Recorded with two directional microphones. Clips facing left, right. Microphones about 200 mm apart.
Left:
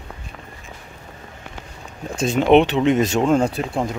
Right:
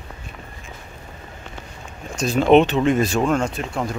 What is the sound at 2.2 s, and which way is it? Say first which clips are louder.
Speech: left 1 dB; 25° left (ahead or behind).